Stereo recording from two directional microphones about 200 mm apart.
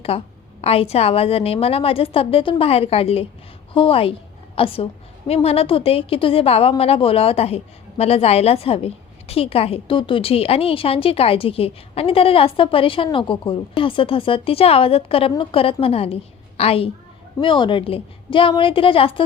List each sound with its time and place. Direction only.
0.1 s a woman's voice: 30° left (ahead or behind)